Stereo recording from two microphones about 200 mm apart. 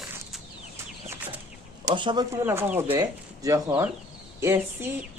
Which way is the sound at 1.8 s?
25° right (ahead or behind).